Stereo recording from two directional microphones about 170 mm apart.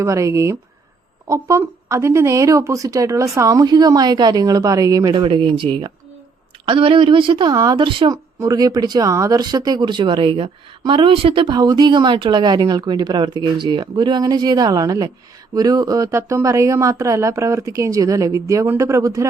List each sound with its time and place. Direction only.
0.0 s a woman's voice: 20° right (ahead or behind)